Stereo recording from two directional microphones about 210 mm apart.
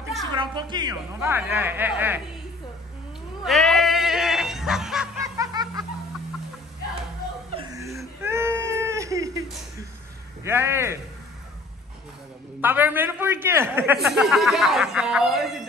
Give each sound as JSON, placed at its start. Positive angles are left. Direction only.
{"t": 0.1, "sound": "a woman's voice", "side_deg": -20}
{"t": 3.4, "sound": "a sound", "side_deg": 0}
{"t": 5.2, "sound": "snicker", "side_deg": -15}
{"t": 7.5, "sound": "chuckle", "side_deg": -15}
{"t": 8.2, "sound": "baby cry", "side_deg": -10}
{"t": 10.4, "sound": "a woman's voice", "side_deg": -10}
{"t": 12.5, "sound": "a man's voice", "side_deg": -10}